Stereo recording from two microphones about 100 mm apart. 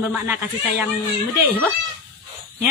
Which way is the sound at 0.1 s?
15° right (ahead or behind).